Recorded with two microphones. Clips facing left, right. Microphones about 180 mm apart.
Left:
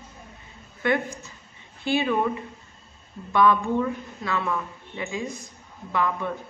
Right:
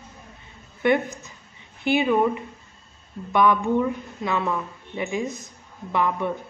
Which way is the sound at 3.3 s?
20° right (ahead or behind).